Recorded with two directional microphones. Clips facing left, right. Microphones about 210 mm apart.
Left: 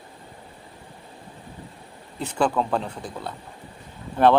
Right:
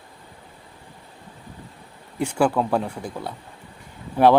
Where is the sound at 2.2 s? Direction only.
10° right (ahead or behind).